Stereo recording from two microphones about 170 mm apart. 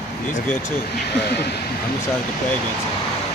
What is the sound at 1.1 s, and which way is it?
Speech, 75° left (ahead or behind).